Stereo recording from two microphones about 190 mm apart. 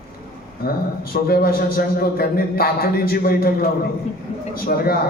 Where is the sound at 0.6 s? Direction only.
50° left (ahead or behind).